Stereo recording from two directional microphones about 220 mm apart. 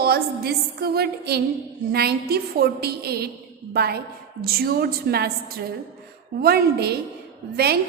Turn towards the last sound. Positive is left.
turn(degrees=-45)  # may be behind; listen again after turning